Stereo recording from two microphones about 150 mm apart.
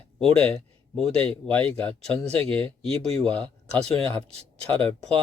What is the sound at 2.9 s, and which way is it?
Speech, 45° right (ahead or behind).